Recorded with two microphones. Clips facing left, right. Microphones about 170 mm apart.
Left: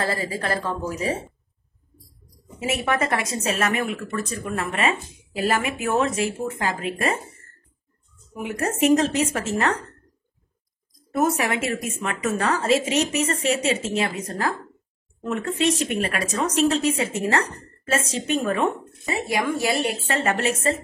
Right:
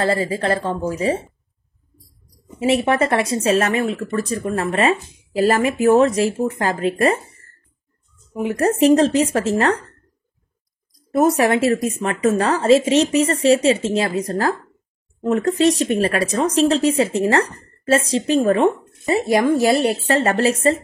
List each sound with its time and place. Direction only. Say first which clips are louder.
0.0 s speech: right 7 dB; 25° right (ahead or behind)
2.6 s speech: right 7 dB; 30° right (ahead or behind)
8.4 s speech: right 7 dB; 35° right (ahead or behind)
11.1 s speech: right 7 dB; 35° right (ahead or behind)